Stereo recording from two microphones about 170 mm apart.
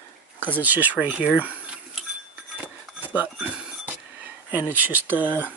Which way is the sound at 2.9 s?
10° right (ahead or behind).